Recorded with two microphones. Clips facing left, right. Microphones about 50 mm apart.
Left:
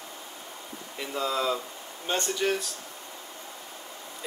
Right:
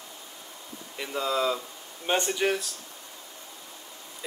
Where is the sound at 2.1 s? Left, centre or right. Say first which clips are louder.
Right 2 dB; right.